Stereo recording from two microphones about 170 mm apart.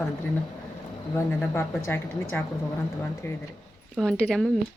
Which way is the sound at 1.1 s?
15° left (ahead or behind).